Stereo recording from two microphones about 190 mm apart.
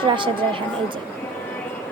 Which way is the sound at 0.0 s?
25° right (ahead or behind).